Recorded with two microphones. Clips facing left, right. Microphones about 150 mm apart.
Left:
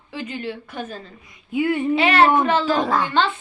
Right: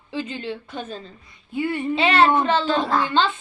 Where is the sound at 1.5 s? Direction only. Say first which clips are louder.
Left 4 dB; 10° left (ahead or behind).